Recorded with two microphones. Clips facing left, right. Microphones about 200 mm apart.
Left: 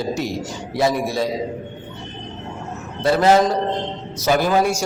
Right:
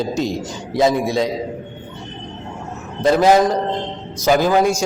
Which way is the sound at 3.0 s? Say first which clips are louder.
Right 2 dB; 15° right (ahead or behind).